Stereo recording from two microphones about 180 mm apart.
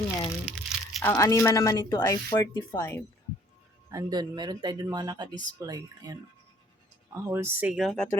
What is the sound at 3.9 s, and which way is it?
Speech, 20° right (ahead or behind).